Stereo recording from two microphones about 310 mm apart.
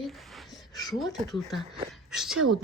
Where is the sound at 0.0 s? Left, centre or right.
Centre.